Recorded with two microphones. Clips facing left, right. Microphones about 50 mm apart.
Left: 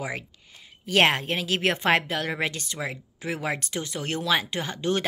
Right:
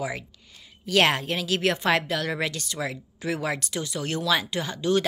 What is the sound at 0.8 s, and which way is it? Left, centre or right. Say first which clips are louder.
Speech: even; left.